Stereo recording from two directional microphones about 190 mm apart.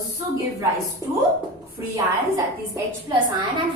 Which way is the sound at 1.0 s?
15° right (ahead or behind).